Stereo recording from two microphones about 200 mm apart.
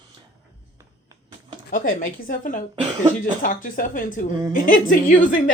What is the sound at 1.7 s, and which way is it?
A woman's voice, 45° left (ahead or behind).